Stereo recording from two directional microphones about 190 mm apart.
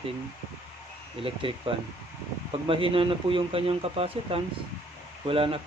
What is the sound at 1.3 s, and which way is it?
Speech, 30° right (ahead or behind).